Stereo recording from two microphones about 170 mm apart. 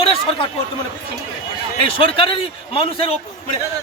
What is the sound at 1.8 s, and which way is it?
A man's voice, 30° left (ahead or behind).